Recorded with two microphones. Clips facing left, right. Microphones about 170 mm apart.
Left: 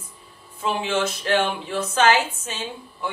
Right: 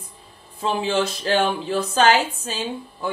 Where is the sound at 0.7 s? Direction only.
35° right (ahead or behind).